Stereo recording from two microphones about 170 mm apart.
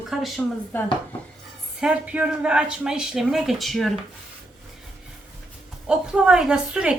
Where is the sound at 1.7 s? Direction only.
5° right (ahead or behind).